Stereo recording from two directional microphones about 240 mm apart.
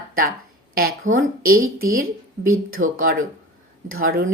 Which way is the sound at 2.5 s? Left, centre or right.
Right.